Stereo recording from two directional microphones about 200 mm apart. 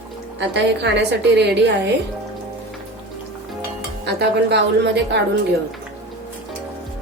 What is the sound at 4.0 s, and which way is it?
A woman's voice, 55° right (ahead or behind).